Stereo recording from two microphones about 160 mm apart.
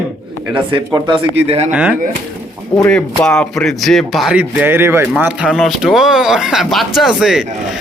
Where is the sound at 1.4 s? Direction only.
40° right (ahead or behind).